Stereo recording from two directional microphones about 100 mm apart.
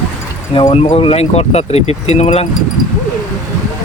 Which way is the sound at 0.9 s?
90° left.